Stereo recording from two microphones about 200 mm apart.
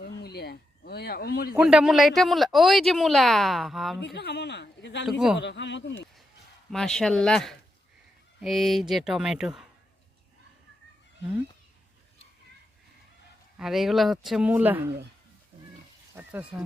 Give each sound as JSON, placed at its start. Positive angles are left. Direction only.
{"t": 0.0, "sound": "a sound", "side_deg": 55}
{"t": 1.5, "sound": "speech", "side_deg": -5}
{"t": 4.0, "sound": "speech", "side_deg": 55}
{"t": 5.0, "sound": "speech", "side_deg": 0}
{"t": 5.4, "sound": "speech", "side_deg": 60}
{"t": 6.7, "sound": "speech", "side_deg": 0}
{"t": 13.6, "sound": "speech", "side_deg": 0}
{"t": 16.1, "sound": "speech", "side_deg": -5}